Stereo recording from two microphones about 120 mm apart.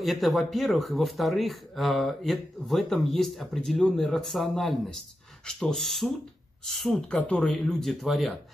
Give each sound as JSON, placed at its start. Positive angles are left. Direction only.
{"t": 0.0, "sound": "speech", "side_deg": 0}